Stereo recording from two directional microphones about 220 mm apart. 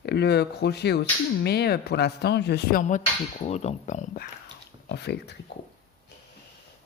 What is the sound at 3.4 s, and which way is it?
Speech, 30° left (ahead or behind).